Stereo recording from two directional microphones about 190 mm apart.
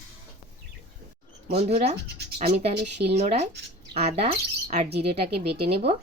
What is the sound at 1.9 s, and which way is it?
Speech, 60° right (ahead or behind).